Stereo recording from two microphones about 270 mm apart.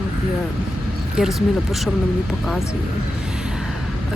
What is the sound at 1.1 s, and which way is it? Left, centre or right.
Speech, centre.